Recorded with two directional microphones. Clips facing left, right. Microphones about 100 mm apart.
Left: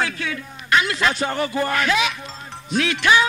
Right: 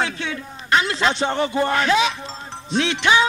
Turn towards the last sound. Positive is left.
turn(degrees=-25)  # may be behind; listen again after turning